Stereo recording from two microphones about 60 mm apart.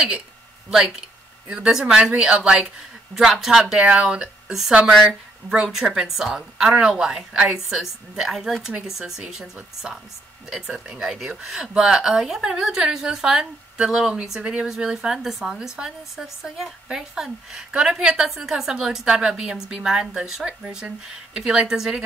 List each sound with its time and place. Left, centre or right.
0.7 s a woman's voice: centre
3.8 s speech: right
4.5 s a woman's voice: centre